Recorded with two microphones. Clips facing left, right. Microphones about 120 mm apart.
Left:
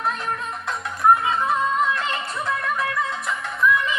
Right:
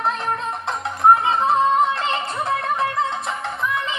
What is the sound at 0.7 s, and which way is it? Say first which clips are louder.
Music: right 2 dB; 30° right (ahead or behind).